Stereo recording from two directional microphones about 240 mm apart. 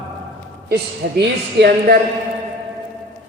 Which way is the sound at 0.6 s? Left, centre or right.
Right.